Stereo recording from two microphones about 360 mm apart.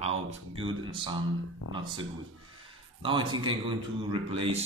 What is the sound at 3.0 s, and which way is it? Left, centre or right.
Speech, centre.